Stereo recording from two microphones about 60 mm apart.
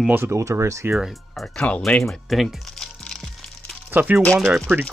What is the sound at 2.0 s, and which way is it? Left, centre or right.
Music, centre.